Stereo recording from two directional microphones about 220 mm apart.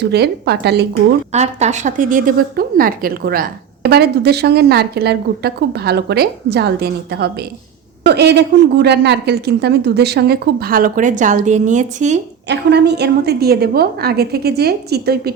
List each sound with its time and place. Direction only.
0.0 s a woman's voice: 50° right (ahead or behind)
1.3 s a woman's voice: 30° right (ahead or behind)
12.5 s a woman's voice: 50° right (ahead or behind)